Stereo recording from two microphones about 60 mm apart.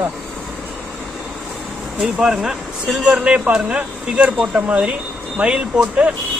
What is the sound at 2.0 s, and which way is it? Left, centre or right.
Speech, centre.